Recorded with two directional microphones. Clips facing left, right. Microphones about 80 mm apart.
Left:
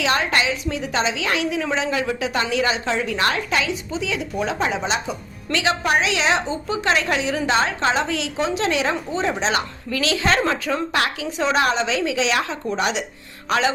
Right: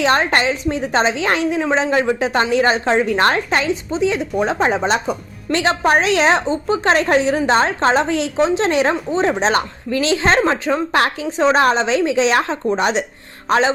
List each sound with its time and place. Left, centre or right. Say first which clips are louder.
0.0 s a woman's voice: right 5 dB; right